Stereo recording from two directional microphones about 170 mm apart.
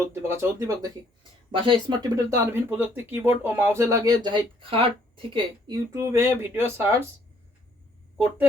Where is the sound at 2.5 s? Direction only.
10° right (ahead or behind).